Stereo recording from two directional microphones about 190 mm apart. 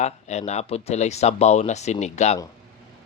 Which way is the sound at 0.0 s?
35° left (ahead or behind).